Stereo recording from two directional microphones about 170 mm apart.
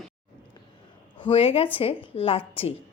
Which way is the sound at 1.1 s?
35° left (ahead or behind).